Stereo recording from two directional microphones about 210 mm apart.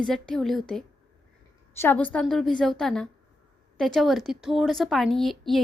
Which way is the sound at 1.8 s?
10° left (ahead or behind).